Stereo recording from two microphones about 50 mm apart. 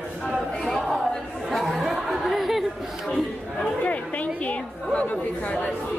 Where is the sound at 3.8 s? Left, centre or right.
Left.